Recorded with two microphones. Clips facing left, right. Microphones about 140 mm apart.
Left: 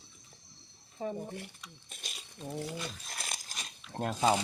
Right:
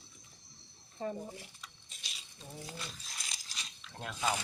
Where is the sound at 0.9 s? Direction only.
10° left (ahead or behind).